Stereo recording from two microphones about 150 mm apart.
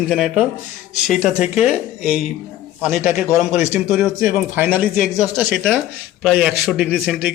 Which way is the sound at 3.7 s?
10° right (ahead or behind).